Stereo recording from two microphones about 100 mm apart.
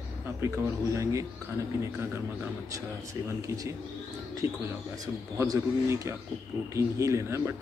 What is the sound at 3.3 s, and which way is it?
Speech, 30° right (ahead or behind).